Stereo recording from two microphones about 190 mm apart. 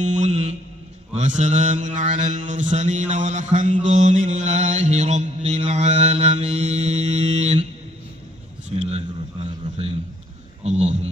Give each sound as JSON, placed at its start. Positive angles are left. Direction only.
{"t": 0.0, "sound": "music", "side_deg": -40}
{"t": 1.1, "sound": "mantra", "side_deg": -40}
{"t": 8.6, "sound": "a sound", "side_deg": -35}